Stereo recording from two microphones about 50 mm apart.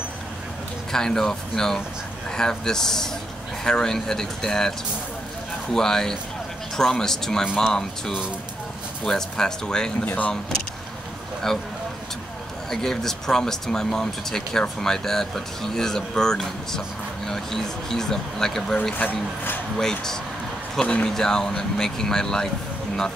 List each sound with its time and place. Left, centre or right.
0.9 s speech: centre
10.0 s speech: left
11.5 s speech: centre
12.6 s speech: centre
18.9 s speech: left
19.8 s speech: centre
21.1 s speech: centre